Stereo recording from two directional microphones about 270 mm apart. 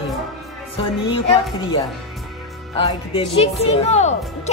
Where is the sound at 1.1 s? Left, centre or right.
Centre.